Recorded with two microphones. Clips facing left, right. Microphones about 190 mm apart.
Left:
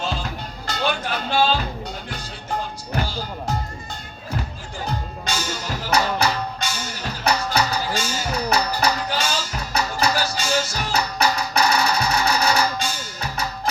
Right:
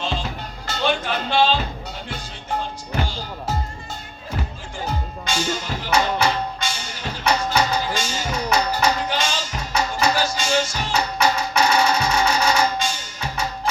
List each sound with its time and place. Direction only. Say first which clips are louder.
0.9 s speech: right 3 dB; 40° left (ahead or behind)
2.9 s music: even; 40° left (ahead or behind)
5.2 s music: right 5 dB; 40° left (ahead or behind)